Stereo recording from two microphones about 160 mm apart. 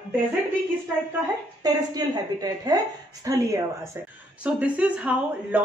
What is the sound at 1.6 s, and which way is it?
A woman's voice, 25° right (ahead or behind).